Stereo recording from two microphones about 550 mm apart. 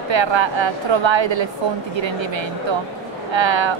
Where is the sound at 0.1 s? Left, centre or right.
Right.